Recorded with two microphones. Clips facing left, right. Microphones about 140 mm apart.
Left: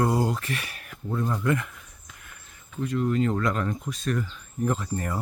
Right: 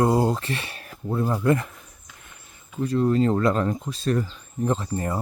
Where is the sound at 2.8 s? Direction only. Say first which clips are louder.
Right 4 dB; 35° right (ahead or behind).